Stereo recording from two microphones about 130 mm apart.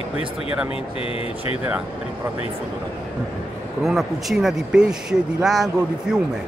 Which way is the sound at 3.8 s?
Centre (ahead or behind).